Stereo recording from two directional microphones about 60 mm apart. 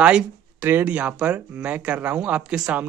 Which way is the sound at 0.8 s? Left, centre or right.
Right.